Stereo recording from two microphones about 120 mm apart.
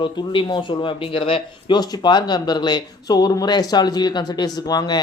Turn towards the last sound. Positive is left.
turn(degrees=35)  # may be behind; listen again after turning